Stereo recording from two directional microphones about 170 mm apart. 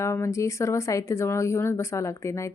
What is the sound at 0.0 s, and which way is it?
Speech, 15° left (ahead or behind).